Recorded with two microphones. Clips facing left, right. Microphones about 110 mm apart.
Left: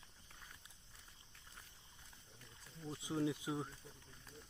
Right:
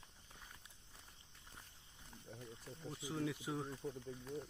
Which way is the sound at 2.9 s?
25° left (ahead or behind).